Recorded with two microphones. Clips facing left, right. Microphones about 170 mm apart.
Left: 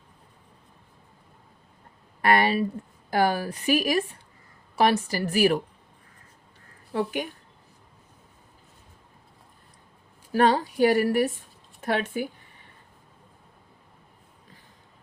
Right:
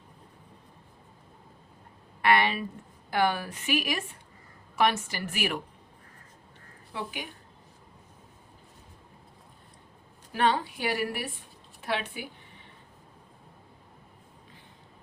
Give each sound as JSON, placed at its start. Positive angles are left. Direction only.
{"t": 2.2, "sound": "a woman's voice", "side_deg": 40}
{"t": 6.9, "sound": "a woman's voice", "side_deg": 50}
{"t": 10.3, "sound": "a woman's voice", "side_deg": 40}